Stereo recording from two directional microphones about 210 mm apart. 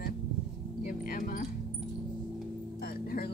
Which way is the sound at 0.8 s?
40° left (ahead or behind).